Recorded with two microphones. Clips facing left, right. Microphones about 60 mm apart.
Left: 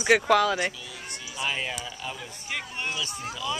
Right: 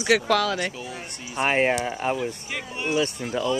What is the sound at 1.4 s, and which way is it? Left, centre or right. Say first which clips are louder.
Speech: right 10 dB; right.